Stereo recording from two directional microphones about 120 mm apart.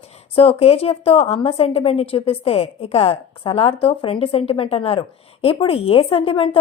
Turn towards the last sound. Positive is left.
turn(degrees=50)  # may be behind; listen again after turning